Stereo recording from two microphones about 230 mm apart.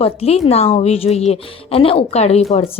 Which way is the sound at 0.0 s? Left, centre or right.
Left.